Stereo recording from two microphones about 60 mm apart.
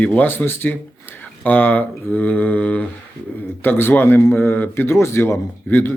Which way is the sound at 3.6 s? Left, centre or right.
Left.